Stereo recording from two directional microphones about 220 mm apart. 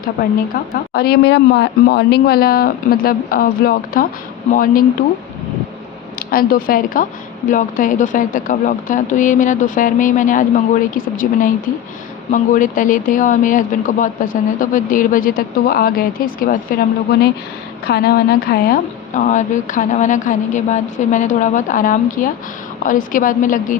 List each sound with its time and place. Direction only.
0.7 s speech: 45° left (ahead or behind)
6.1 s speech: 40° left (ahead or behind)